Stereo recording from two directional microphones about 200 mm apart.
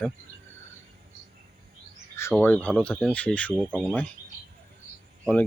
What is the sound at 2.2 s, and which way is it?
Speech, 15° left (ahead or behind).